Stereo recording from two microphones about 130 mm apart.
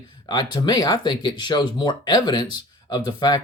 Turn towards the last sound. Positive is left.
turn(degrees=30)  # may be behind; listen again after turning